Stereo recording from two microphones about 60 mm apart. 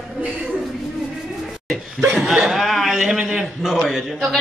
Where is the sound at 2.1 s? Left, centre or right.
Centre.